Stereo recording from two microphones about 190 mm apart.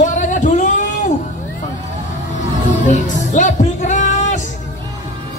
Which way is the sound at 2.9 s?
40° left (ahead or behind).